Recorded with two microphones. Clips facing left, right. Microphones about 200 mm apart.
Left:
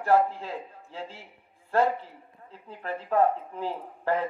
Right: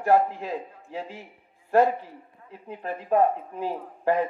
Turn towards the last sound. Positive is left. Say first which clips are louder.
# right 4 dB
turn(degrees=-15)  # may be behind; listen again after turning